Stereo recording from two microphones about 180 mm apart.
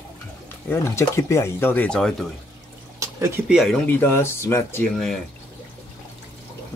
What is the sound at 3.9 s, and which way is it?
Speech, 10° left (ahead or behind).